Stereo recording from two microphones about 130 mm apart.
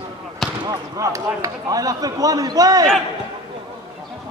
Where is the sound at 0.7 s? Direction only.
25° right (ahead or behind).